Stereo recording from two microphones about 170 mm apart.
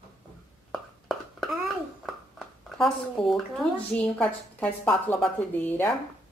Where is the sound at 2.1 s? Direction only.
Centre (ahead or behind).